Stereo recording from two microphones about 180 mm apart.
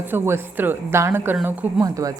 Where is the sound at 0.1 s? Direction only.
10° right (ahead or behind).